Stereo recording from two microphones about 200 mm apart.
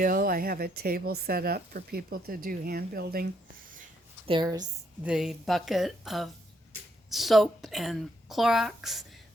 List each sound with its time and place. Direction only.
0.0 s speech: 45° right (ahead or behind)
4.3 s a woman's voice: 20° right (ahead or behind)
5.0 s speech: 5° right (ahead or behind)